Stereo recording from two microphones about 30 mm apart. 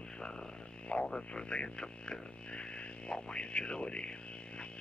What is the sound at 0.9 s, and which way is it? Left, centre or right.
Speech, left.